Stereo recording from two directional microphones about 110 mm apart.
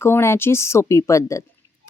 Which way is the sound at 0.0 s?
25° left (ahead or behind).